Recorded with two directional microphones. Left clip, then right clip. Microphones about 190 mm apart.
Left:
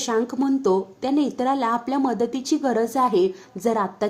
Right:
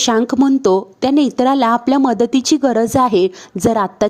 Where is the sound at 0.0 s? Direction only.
45° right (ahead or behind).